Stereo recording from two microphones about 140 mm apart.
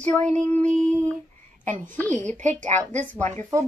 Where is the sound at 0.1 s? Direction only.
10° left (ahead or behind).